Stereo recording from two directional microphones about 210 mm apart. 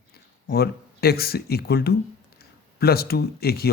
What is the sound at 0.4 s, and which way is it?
A man's voice, 50° left (ahead or behind).